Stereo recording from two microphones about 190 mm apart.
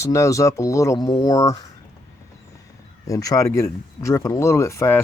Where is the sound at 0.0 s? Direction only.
15° left (ahead or behind).